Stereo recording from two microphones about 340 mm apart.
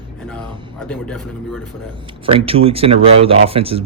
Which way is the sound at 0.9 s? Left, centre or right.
Centre.